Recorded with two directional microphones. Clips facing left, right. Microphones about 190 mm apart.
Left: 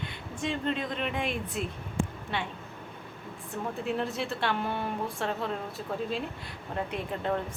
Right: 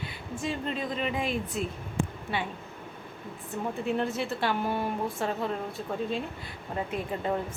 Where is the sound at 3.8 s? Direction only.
Centre (ahead or behind).